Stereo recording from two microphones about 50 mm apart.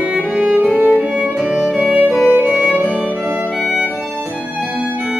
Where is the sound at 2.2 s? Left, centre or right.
Right.